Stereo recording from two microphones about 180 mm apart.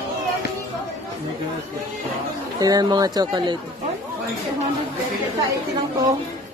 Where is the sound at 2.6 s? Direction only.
20° right (ahead or behind).